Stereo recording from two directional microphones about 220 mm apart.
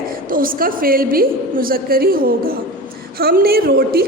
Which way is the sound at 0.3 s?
40° right (ahead or behind).